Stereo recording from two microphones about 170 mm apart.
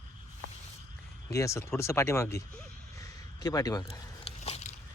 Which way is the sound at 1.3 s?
15° left (ahead or behind).